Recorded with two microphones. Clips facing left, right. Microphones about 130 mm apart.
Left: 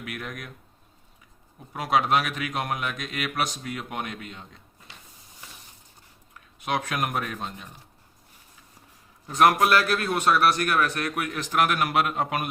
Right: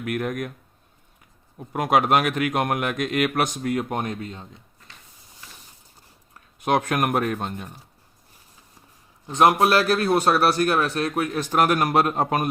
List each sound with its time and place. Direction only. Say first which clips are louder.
0.0 s speech: right 10 dB; 50° right (ahead or behind)
1.7 s speech: right 4 dB; 50° right (ahead or behind); by 4.4 s 35° right (ahead or behind)
6.6 s speech: right 6 dB; 50° right (ahead or behind)
9.2 s a man's voice: right 2 dB; 25° right (ahead or behind); by 12.5 s 40° right (ahead or behind)